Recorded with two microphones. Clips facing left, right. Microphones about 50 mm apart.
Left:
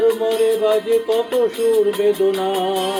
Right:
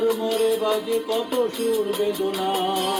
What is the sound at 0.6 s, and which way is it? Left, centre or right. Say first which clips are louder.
Music: left 6 dB; left.